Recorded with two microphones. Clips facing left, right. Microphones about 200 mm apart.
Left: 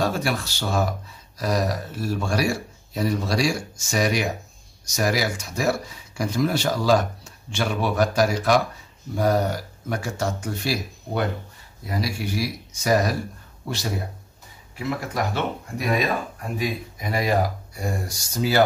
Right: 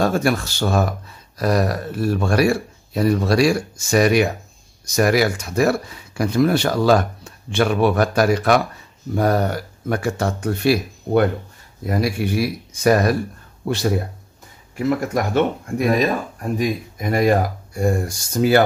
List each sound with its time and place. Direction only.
0.0 s speech: 50° right (ahead or behind)
14.8 s speech: 45° right (ahead or behind)